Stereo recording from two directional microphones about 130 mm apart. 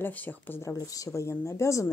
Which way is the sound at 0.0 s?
15° left (ahead or behind).